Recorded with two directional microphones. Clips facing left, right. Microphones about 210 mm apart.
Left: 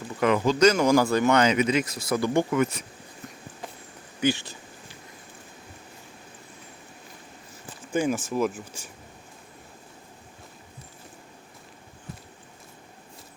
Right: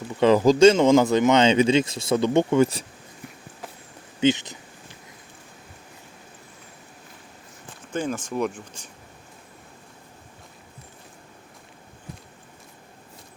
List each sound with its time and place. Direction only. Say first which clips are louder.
0.2 s speech: right 5 dB; 30° right (ahead or behind)
4.2 s speech: right 4 dB; 20° right (ahead or behind)
7.9 s speech: left 2 dB; 10° left (ahead or behind)